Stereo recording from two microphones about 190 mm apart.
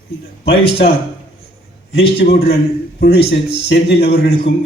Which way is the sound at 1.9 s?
55° left (ahead or behind).